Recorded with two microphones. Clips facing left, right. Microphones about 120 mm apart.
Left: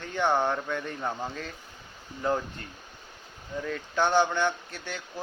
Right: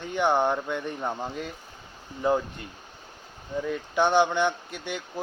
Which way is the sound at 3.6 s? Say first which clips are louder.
Right 3 dB; 15° right (ahead or behind).